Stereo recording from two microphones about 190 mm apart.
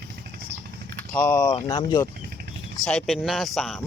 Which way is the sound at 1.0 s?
10° left (ahead or behind).